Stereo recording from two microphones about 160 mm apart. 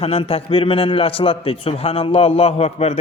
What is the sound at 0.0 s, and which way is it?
A man's voice, 35° left (ahead or behind).